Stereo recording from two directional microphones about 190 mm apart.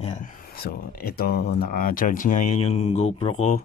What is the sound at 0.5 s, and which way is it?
Speech, 50° left (ahead or behind).